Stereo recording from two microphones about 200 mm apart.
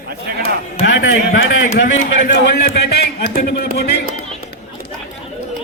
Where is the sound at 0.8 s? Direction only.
65° left (ahead or behind).